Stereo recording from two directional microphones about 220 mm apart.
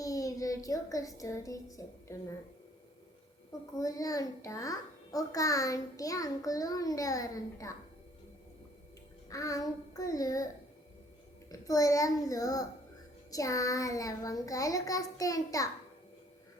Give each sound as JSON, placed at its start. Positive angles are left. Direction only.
{"t": 0.0, "sound": "speech", "side_deg": 15}
{"t": 3.8, "sound": "a child's voice", "side_deg": 15}
{"t": 9.3, "sound": "a child's voice", "side_deg": 15}
{"t": 11.6, "sound": "a child's voice", "side_deg": 15}